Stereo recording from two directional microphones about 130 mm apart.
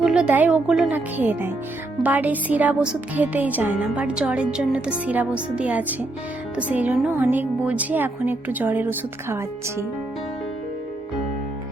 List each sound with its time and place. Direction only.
0.0 s a woman's voice: 5° right (ahead or behind)